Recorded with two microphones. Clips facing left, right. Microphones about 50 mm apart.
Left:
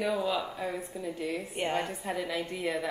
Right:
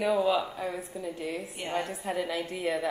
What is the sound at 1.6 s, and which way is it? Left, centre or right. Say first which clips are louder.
Speech: left 2 dB; left.